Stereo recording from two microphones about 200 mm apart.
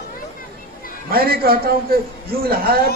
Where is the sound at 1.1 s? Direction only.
50° right (ahead or behind).